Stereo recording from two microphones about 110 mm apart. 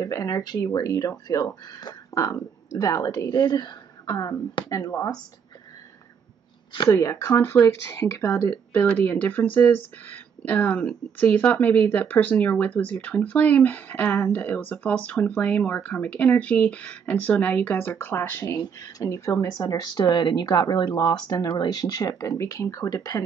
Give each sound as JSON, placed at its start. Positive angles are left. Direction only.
{"t": 0.0, "sound": "speech", "side_deg": 30}
{"t": 6.9, "sound": "speech", "side_deg": 25}
{"t": 18.6, "sound": "speech", "side_deg": 35}